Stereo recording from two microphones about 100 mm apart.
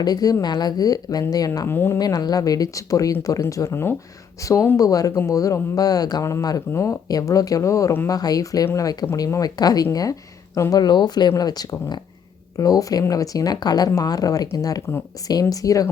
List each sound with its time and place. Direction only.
0.0 s speech: 40° left (ahead or behind)
1.6 s speech: 25° left (ahead or behind)
2.0 s speech: 40° left (ahead or behind)